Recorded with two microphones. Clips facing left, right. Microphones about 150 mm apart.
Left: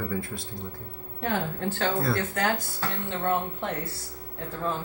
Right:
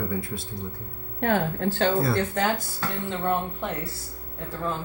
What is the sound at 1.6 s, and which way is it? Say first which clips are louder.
Speech: right 4 dB; 45° right (ahead or behind).